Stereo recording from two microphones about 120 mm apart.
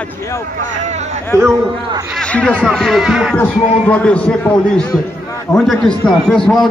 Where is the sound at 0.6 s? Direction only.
90° right; by 1.2 s 75° right (ahead or behind).